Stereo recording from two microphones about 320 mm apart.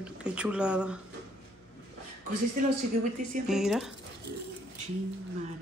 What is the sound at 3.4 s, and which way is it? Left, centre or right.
Speech, centre.